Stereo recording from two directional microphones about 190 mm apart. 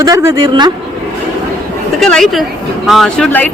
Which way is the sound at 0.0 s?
15° right (ahead or behind).